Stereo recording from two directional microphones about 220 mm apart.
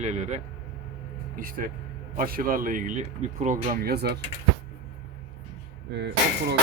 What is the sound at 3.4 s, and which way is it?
Music, 35° right (ahead or behind).